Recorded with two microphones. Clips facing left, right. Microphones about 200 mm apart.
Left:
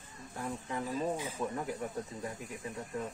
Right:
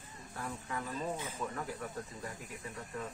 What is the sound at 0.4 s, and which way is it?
Speech, 20° left (ahead or behind).